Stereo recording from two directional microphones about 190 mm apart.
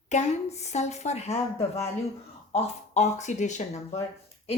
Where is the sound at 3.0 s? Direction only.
35° left (ahead or behind).